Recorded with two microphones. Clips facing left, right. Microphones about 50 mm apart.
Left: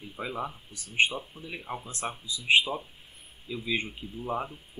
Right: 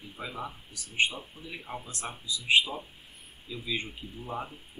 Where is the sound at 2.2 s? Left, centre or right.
Left.